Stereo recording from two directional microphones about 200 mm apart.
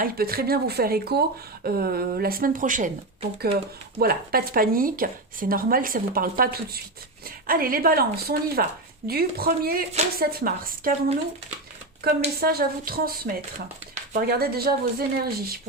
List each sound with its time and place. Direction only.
0.0 s speech: 50° right (ahead or behind)
12.4 s speech: 50° right (ahead or behind)